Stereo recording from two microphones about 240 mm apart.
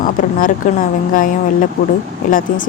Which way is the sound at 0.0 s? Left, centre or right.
Left.